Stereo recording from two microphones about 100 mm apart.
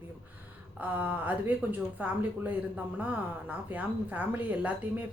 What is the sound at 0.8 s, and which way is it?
Speech, 15° right (ahead or behind).